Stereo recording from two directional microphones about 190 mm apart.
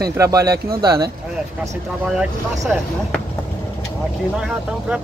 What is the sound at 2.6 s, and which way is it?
Speech, centre (ahead or behind).